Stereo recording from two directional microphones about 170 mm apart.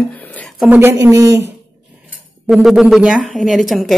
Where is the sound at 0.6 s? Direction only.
10° right (ahead or behind).